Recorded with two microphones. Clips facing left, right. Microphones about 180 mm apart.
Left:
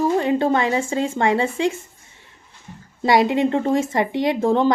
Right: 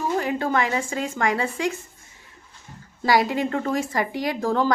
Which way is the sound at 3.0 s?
25° left (ahead or behind).